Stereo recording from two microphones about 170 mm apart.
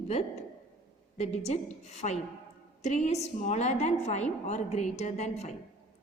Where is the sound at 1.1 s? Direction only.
40° left (ahead or behind).